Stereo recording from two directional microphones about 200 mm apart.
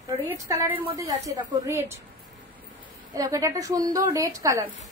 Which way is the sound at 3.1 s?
15° right (ahead or behind).